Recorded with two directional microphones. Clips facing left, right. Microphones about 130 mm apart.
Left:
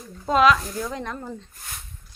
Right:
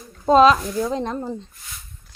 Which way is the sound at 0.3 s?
30° right (ahead or behind).